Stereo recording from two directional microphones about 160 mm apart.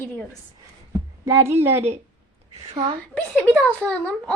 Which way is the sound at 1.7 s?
40° right (ahead or behind).